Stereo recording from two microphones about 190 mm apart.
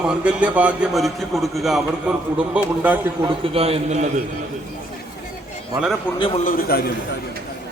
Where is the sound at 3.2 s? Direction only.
30° right (ahead or behind).